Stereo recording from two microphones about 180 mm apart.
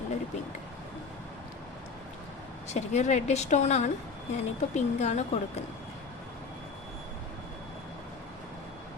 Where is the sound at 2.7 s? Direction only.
40° left (ahead or behind).